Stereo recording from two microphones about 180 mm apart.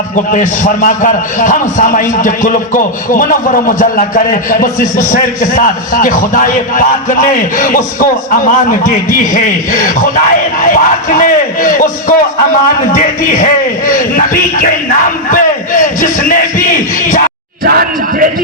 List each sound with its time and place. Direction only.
0.3 s a man's voice: 45° left (ahead or behind)
15.3 s a man's voice: 50° left (ahead or behind)